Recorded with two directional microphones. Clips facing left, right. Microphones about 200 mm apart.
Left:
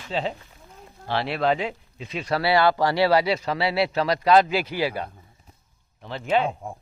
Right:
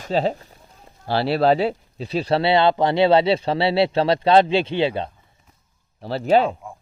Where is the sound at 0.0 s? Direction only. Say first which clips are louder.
Right 7 dB; 40° right (ahead or behind).